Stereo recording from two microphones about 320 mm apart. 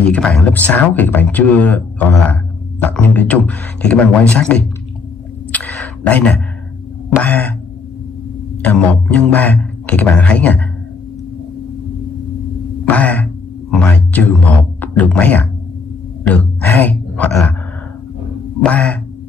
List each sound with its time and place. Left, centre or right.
0.0 s speech: centre
5.5 s a sound: centre
7.2 s speech: centre
8.6 s speech: centre
12.8 s a man's voice: centre
18.6 s speech: centre